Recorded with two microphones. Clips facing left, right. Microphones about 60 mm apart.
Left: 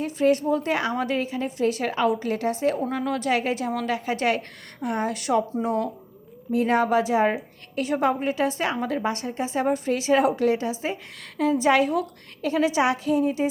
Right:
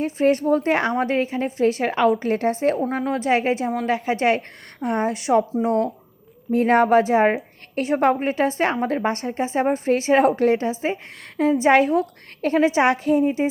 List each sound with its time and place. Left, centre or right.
0.0 s a woman's voice: right
2.9 s a woman's voice: right
6.5 s a woman's voice: right